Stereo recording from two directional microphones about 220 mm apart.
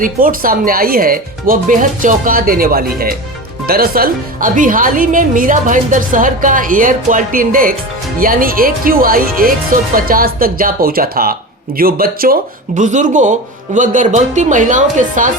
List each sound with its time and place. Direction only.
0.0 s speech: 40° right (ahead or behind)